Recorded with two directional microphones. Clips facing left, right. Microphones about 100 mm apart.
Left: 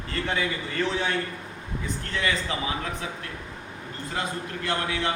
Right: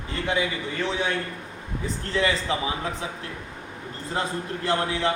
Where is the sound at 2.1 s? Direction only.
30° right (ahead or behind).